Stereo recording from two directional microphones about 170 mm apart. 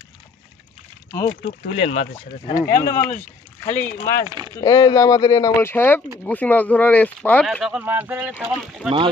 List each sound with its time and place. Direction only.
1.7 s speech: 40° left (ahead or behind)
2.5 s speech: 15° left (ahead or behind)
3.1 s speech: 45° left (ahead or behind)
3.8 s speech: 15° left (ahead or behind); by 8.9 s centre (ahead or behind)